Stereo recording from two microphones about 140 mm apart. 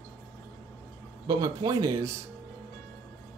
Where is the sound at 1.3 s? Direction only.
30° right (ahead or behind).